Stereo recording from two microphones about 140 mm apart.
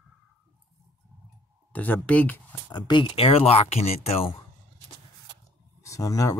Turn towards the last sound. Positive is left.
turn(degrees=25)  # may be behind; listen again after turning